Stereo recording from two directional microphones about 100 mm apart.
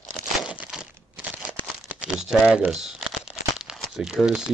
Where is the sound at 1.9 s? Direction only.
5° right (ahead or behind).